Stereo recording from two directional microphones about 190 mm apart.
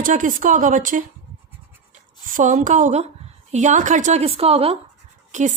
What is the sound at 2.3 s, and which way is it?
A woman's voice, 45° right (ahead or behind).